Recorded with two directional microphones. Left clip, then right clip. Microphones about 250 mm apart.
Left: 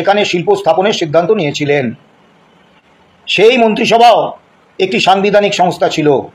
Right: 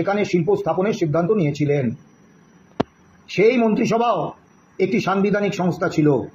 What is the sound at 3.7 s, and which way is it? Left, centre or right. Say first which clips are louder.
Speech: left 12 dB; left.